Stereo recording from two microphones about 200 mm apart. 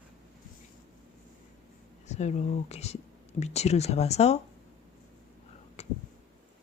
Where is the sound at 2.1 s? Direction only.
35° left (ahead or behind).